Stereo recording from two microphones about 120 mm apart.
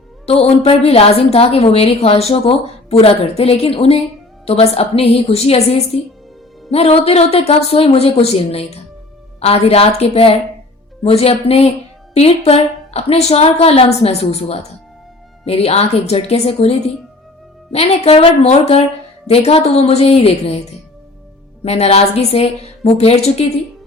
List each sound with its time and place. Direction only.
0.3 s a woman's voice: 55° left (ahead or behind)
21.6 s a woman's voice: 60° left (ahead or behind)